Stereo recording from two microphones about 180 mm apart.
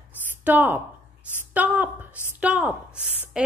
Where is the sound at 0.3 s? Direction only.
10° right (ahead or behind).